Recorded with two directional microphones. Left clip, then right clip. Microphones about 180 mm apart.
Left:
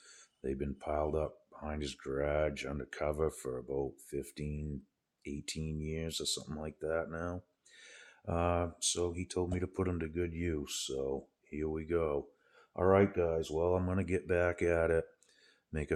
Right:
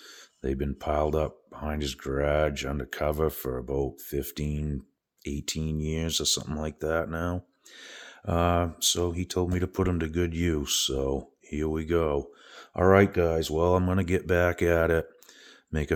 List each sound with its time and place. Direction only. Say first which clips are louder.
0.4 s speech: right 8 dB; 30° right (ahead or behind)